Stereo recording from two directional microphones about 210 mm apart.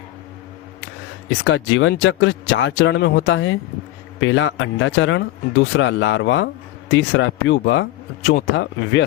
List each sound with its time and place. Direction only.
1.3 s speech: 60° left (ahead or behind)